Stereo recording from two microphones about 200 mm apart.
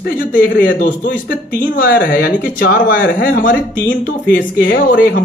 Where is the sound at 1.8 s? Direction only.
45° left (ahead or behind).